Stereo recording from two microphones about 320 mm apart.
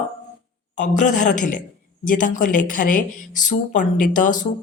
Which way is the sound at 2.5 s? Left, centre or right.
Left.